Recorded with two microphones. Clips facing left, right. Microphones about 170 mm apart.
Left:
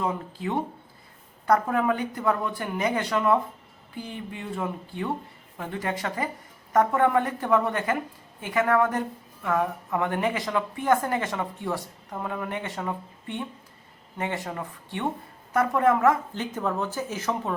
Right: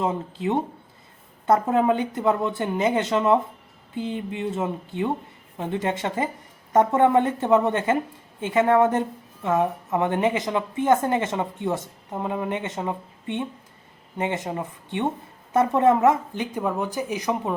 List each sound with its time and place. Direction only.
0.0 s a woman's voice: 20° right (ahead or behind)